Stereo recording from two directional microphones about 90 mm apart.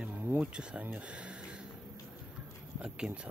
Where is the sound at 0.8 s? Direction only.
15° right (ahead or behind).